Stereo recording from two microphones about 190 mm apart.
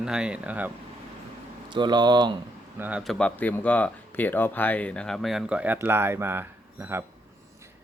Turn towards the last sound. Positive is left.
turn(degrees=-10)  # may be behind; listen again after turning